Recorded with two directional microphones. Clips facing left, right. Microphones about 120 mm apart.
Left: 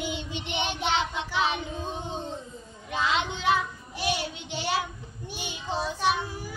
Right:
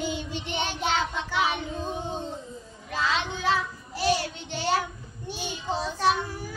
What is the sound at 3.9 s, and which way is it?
Child singing, 40° right (ahead or behind).